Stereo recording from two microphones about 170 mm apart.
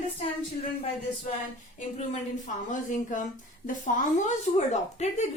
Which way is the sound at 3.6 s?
50° left (ahead or behind).